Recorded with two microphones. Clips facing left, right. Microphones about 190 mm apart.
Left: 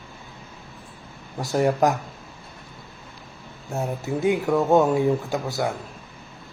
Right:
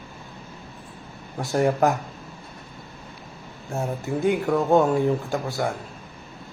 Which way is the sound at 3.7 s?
Centre (ahead or behind).